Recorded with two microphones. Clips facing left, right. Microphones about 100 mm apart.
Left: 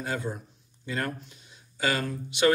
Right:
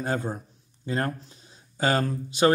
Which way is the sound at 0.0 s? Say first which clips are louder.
Right 3 dB; 40° right (ahead or behind).